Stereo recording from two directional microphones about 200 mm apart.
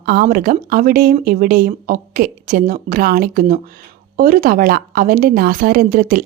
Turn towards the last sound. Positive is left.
turn(degrees=-45)  # may be behind; listen again after turning